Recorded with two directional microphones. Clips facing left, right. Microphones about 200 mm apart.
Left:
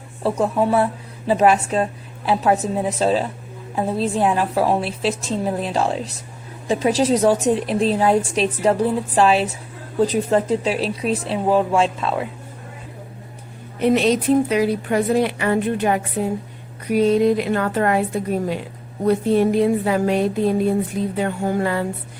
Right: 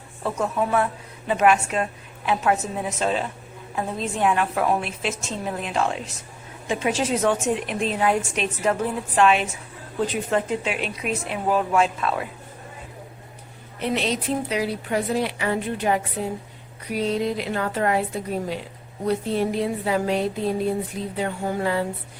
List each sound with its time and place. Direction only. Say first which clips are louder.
0.2 s a woman's voice: left 5 dB; 30° left (ahead or behind)
13.7 s a woman's voice: left 8 dB; 50° left (ahead or behind)
19.0 s a woman's voice: left 6 dB; 50° left (ahead or behind)
21.2 s a sound: left 3 dB; 55° left (ahead or behind)